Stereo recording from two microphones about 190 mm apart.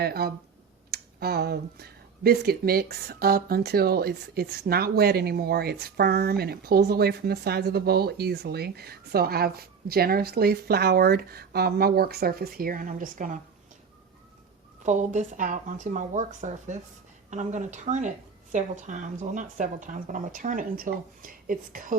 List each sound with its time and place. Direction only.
0.0 s speech: 55° right (ahead or behind)
14.8 s speech: 40° right (ahead or behind)